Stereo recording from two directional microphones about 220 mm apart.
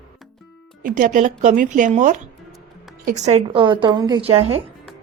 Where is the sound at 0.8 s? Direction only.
35° right (ahead or behind).